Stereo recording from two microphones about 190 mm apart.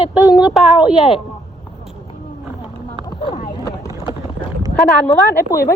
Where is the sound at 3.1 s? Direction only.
25° left (ahead or behind).